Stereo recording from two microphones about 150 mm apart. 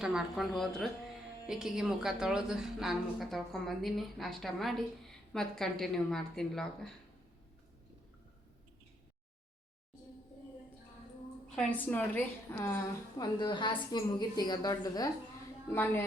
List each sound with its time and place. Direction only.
0.0 s a woman's voice: 5° right (ahead or behind)
11.5 s a woman's voice: 10° left (ahead or behind)
13.1 s a woman's voice: 30° left (ahead or behind)